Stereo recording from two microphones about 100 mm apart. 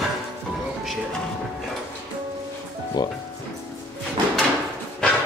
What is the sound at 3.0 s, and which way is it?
Speech, 45° left (ahead or behind).